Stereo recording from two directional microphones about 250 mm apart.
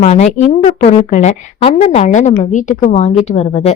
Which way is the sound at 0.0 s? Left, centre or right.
Left.